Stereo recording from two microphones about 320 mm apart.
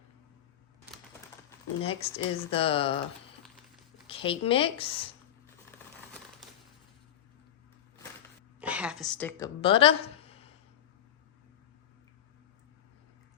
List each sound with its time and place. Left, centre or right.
1.5 s speech: centre
4.0 s speech: centre
8.6 s a woman's voice: centre
9.6 s speech: centre